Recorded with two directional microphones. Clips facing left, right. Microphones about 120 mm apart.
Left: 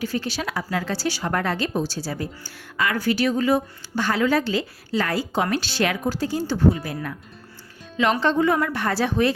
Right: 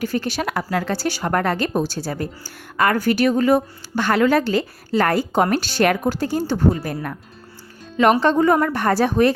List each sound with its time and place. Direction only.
0.0 s a woman's voice: 50° right (ahead or behind)
8.2 s a woman's voice: 45° right (ahead or behind)